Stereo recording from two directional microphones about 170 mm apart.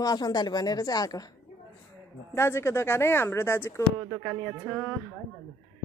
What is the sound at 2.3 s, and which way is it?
Speech, 15° left (ahead or behind).